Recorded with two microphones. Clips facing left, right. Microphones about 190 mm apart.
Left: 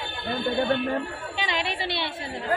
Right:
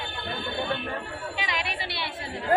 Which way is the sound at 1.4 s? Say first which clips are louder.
Left 5 dB; 30° left (ahead or behind).